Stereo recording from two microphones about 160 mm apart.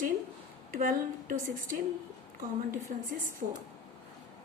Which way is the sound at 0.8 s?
55° right (ahead or behind).